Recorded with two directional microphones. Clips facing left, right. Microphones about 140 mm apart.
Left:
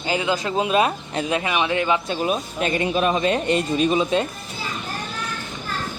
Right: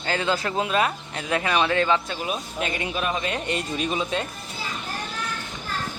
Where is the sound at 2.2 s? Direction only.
35° left (ahead or behind); by 4.2 s 20° left (ahead or behind).